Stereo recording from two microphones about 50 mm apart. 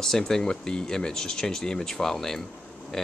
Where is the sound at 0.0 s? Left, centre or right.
Centre.